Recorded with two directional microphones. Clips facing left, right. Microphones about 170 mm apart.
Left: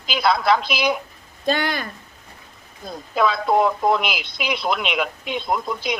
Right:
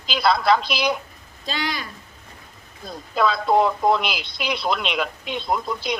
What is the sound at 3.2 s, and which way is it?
Speech, centre (ahead or behind).